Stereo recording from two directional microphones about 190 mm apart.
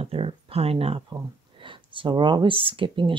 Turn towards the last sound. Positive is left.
turn(degrees=-25)  # may be behind; listen again after turning